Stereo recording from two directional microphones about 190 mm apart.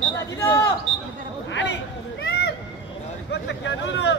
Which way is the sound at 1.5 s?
70° left (ahead or behind).